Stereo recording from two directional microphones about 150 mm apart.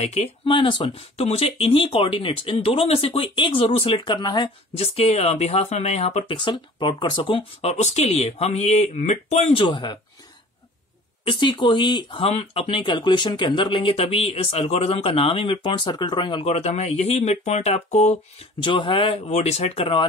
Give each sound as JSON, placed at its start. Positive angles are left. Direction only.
{"t": 0.0, "sound": "speech", "side_deg": 45}
{"t": 0.6, "sound": "speech", "side_deg": 30}
{"t": 4.9, "sound": "speech", "side_deg": 45}
{"t": 7.7, "sound": "speech", "side_deg": 50}
{"t": 9.5, "sound": "speech", "side_deg": 35}
{"t": 11.2, "sound": "speech", "side_deg": 30}
{"t": 18.6, "sound": "speech", "side_deg": 35}